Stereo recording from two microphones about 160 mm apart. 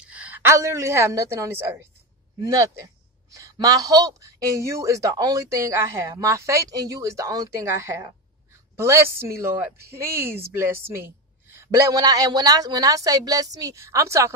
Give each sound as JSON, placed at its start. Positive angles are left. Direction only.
{"t": 0.0, "sound": "a woman's voice", "side_deg": -10}